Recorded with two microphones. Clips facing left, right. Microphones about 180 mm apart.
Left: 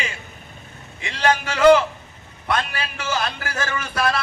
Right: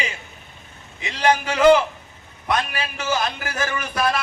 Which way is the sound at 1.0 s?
15° right (ahead or behind).